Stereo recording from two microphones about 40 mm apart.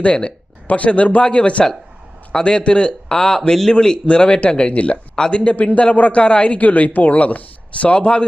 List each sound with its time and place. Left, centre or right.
0.0 s a man's voice: left
5.1 s speech: centre
5.5 s a man's voice: left